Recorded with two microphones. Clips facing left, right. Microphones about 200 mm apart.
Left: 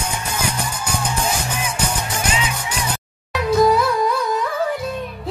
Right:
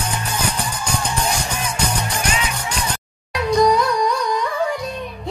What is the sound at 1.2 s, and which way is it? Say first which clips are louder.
Music: even; 10° left (ahead or behind).